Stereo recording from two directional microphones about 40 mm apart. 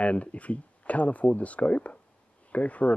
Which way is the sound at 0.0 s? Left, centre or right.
Left.